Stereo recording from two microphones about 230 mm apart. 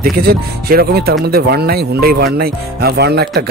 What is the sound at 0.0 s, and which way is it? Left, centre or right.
Speech, right.